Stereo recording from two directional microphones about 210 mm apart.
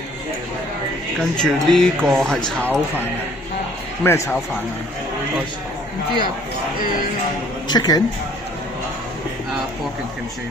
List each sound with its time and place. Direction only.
1.3 s a man's voice: centre (ahead or behind)
6.8 s speech: 40° left (ahead or behind)
7.6 s speech: 20° left (ahead or behind)